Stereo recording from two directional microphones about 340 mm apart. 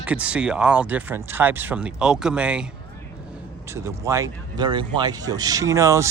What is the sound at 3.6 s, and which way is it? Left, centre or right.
Speech, centre.